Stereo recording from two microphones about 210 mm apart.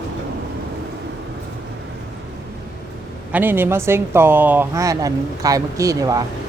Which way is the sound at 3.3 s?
10° right (ahead or behind).